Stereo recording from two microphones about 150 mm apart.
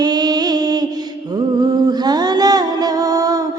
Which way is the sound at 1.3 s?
25° right (ahead or behind).